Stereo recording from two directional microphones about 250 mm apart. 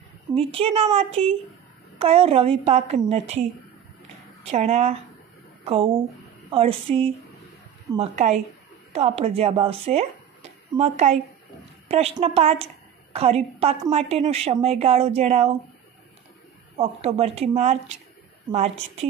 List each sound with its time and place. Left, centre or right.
0.3 s a woman's voice: right
16.7 s a woman's voice: right